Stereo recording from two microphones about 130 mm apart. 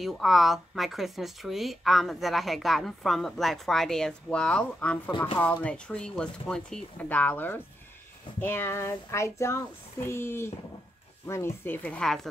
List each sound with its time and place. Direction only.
0.0 s speech: centre (ahead or behind)